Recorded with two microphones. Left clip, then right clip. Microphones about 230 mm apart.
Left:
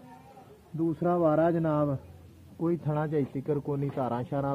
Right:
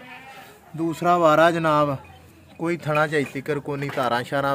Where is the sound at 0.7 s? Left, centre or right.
Centre.